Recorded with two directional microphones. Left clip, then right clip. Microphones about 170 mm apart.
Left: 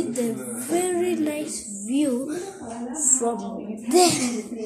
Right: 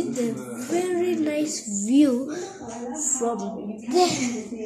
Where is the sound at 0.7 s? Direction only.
5° left (ahead or behind).